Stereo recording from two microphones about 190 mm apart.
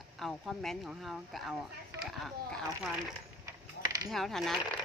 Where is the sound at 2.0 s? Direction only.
Centre (ahead or behind).